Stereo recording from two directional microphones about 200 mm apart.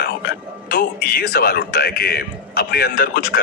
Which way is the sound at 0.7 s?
50° left (ahead or behind).